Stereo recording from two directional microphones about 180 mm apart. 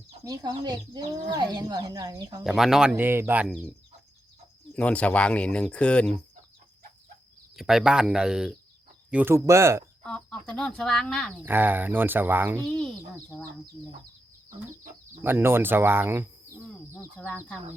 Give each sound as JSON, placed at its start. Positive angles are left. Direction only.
{"t": 0.3, "sound": "speech", "side_deg": -20}
{"t": 2.4, "sound": "speech", "side_deg": 0}
{"t": 2.9, "sound": "speech", "side_deg": -15}
{"t": 4.7, "sound": "speech", "side_deg": 5}
{"t": 7.5, "sound": "speech", "side_deg": -5}
{"t": 10.0, "sound": "speech", "side_deg": 5}
{"t": 11.4, "sound": "speech", "side_deg": -10}
{"t": 12.6, "sound": "speech", "side_deg": 5}
{"t": 15.2, "sound": "speech", "side_deg": -10}
{"t": 16.9, "sound": "speech", "side_deg": 10}